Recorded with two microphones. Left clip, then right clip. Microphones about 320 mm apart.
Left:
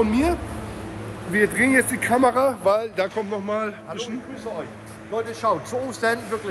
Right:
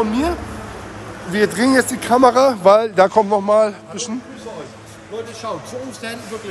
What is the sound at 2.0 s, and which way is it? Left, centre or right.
Speech, centre.